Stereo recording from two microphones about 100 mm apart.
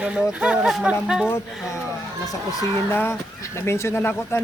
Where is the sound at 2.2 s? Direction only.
35° left (ahead or behind).